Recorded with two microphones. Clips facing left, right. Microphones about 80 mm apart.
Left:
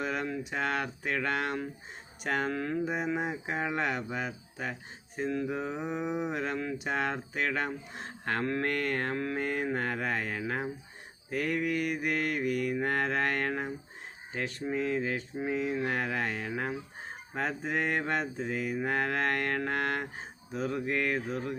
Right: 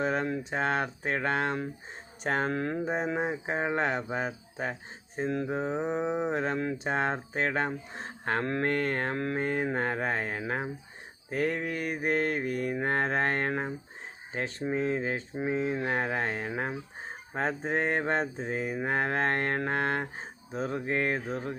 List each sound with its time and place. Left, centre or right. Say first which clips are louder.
0.0 s speech: right 4 dB; right